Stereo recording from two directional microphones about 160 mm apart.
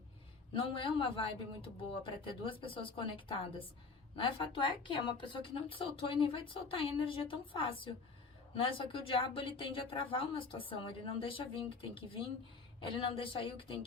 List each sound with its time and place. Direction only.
0.5 s a woman's voice: 35° left (ahead or behind)
2.2 s a woman's voice: 35° left (ahead or behind)